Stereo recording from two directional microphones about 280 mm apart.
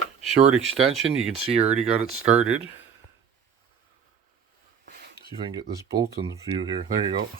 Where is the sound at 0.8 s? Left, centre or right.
Right.